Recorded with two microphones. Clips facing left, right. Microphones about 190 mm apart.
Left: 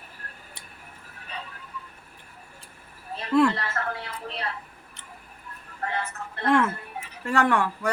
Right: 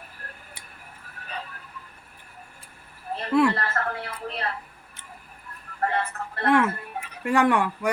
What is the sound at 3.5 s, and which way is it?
Television, 55° right (ahead or behind).